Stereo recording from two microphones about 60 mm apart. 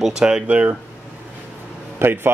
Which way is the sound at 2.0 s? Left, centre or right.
Right.